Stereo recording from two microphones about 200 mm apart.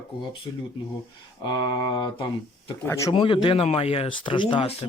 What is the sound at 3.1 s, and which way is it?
Speech, 25° left (ahead or behind).